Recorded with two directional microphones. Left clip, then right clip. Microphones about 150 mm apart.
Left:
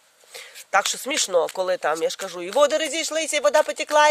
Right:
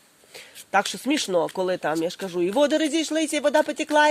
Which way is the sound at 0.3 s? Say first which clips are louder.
Left 1 dB; 40° left (ahead or behind).